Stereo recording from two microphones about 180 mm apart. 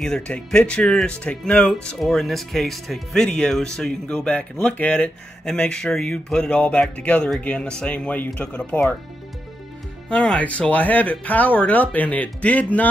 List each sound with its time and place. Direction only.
0.0 s speech: 5° left (ahead or behind)
10.0 s speech: 5° left (ahead or behind)